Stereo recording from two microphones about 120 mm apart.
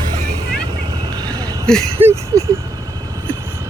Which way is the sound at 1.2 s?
30° right (ahead or behind).